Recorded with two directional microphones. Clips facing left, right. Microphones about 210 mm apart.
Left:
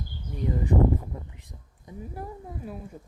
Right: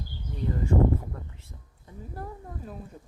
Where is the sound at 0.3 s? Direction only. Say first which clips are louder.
Left 1 dB; 15° left (ahead or behind).